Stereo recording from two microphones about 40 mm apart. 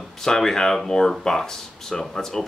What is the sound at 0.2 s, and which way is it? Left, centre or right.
Speech, centre.